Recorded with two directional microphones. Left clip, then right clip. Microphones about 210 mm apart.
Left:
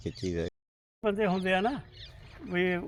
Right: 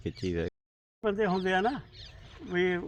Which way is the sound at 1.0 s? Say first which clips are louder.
Even; 50° left (ahead or behind).